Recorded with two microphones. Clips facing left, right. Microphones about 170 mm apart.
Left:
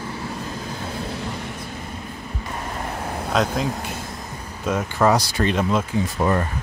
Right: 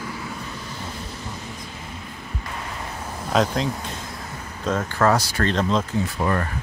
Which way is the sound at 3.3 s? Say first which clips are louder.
Right 1 dB; centre (ahead or behind).